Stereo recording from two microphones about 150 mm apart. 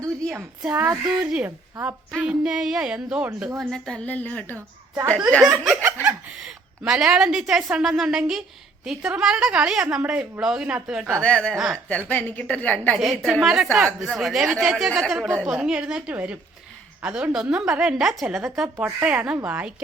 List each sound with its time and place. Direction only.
0.0 s a woman's voice: 15° right (ahead or behind)
2.2 s speech: 5° right (ahead or behind)
3.6 s a woman's voice: 5° left (ahead or behind)
5.4 s speech: 5° right (ahead or behind)
11.2 s speech: 5° left (ahead or behind)
11.9 s a woman's voice: 10° left (ahead or behind)
13.0 s a woman's voice: centre (ahead or behind)